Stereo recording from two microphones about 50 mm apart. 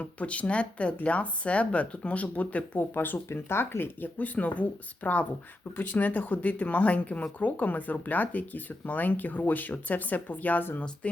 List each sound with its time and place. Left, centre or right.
0.0 s speech: left
2.7 s speech: left
11.0 s speech: left